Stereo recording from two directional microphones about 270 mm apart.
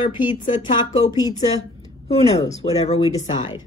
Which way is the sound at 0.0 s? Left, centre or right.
Centre.